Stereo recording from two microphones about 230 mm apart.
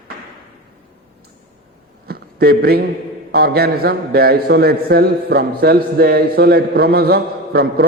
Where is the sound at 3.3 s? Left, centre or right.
Right.